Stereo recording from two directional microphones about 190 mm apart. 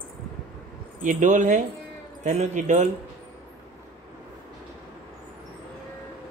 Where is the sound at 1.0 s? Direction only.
40° right (ahead or behind).